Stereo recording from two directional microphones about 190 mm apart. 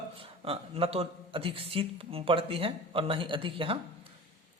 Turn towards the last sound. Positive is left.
turn(degrees=-30)  # may be behind; listen again after turning